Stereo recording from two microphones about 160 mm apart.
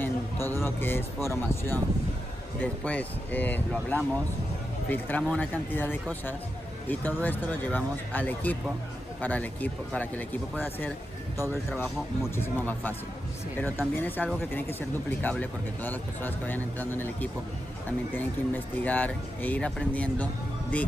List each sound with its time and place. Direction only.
0.0 s a man's voice: 15° left (ahead or behind)
12.4 s speech: 10° left (ahead or behind)